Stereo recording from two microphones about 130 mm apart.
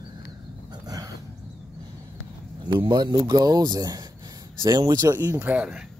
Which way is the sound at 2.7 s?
30° right (ahead or behind).